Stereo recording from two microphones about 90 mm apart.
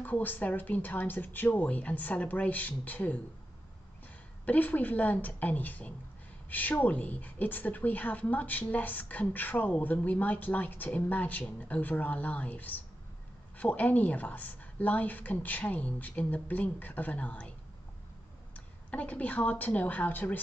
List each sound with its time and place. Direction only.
0.0 s a woman's voice: 20° left (ahead or behind)
4.5 s a woman's voice: 20° left (ahead or behind)
18.9 s a woman's voice: 15° left (ahead or behind)